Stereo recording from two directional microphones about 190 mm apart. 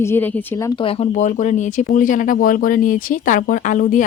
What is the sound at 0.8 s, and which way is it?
Speech, 30° left (ahead or behind).